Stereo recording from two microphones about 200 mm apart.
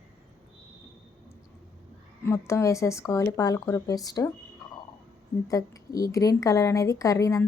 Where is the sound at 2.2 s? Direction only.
15° left (ahead or behind).